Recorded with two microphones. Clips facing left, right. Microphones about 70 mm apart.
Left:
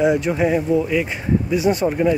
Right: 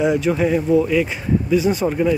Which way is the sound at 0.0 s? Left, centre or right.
Centre.